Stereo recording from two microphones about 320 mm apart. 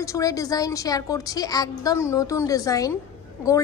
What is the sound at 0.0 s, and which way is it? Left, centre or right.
A woman's voice, centre.